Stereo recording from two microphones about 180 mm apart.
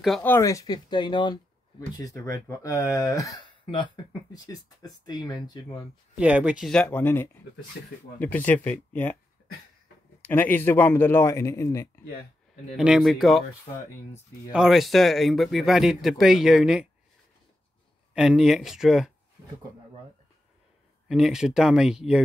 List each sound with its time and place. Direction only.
0.2 s speech: 15° left (ahead or behind)
6.1 s speech: 10° right (ahead or behind); by 9.1 s 10° left (ahead or behind)
10.2 s speech: 10° left (ahead or behind)
12.7 s speech: 5° right (ahead or behind)
14.5 s speech: centre (ahead or behind)
18.1 s speech: 5° right (ahead or behind)
21.1 s speech: 5° right (ahead or behind)